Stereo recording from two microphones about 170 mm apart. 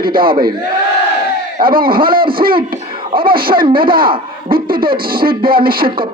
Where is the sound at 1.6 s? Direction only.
60° right (ahead or behind).